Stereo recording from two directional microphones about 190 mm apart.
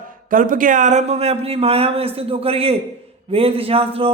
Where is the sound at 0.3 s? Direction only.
45° right (ahead or behind).